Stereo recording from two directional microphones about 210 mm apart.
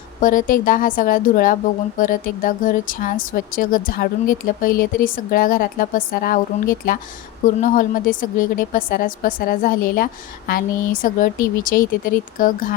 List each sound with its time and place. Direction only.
0.2 s a woman's voice: 40° left (ahead or behind)